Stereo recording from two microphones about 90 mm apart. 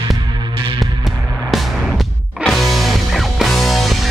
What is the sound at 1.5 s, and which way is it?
Music, centre (ahead or behind).